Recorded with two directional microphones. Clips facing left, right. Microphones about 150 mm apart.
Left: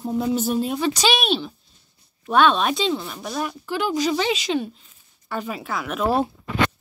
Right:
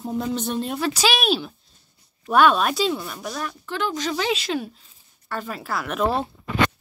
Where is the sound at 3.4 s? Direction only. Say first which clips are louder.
Left 3 dB; 10° left (ahead or behind).